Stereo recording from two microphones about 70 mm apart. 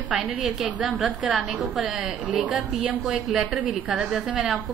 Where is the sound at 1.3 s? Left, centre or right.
Centre.